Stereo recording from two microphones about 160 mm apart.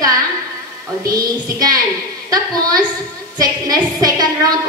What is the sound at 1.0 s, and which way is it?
A woman's voice, 25° right (ahead or behind).